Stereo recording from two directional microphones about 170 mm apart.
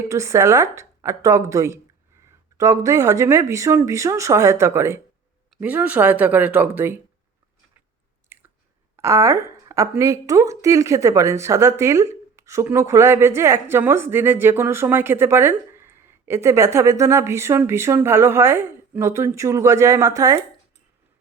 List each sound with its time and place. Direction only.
0.1 s a woman's voice: 15° right (ahead or behind)
8.3 s chewing: 10° right (ahead or behind)
9.0 s a woman's voice: 15° right (ahead or behind)